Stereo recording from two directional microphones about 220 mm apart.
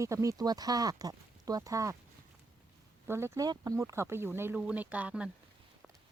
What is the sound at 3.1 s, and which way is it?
Speech, 10° right (ahead or behind).